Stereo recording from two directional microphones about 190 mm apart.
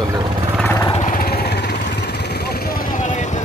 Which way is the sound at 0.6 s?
10° left (ahead or behind).